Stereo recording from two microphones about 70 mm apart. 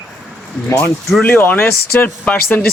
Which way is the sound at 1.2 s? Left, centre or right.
Left.